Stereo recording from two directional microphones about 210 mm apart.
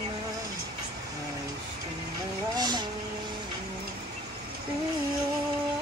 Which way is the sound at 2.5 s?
20° right (ahead or behind).